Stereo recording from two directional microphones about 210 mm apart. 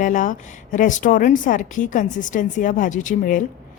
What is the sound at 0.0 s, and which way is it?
Speech, 40° left (ahead or behind).